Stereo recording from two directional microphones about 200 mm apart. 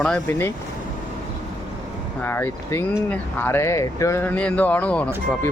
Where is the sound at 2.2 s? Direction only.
10° left (ahead or behind).